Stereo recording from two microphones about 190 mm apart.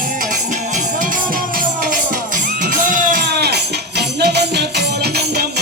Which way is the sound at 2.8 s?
45° right (ahead or behind).